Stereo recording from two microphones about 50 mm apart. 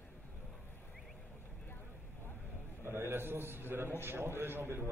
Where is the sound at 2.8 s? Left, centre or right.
Right.